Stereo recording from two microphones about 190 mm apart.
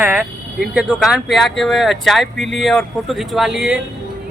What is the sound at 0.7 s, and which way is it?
Speech, 5° right (ahead or behind).